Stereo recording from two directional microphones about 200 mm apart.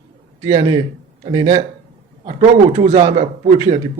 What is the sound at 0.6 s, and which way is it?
A man's voice, 25° right (ahead or behind).